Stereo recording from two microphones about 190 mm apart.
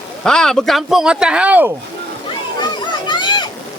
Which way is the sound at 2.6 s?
25° left (ahead or behind).